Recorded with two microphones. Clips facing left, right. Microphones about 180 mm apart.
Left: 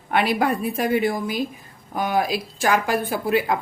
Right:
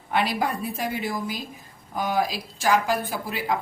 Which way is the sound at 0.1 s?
60° left (ahead or behind).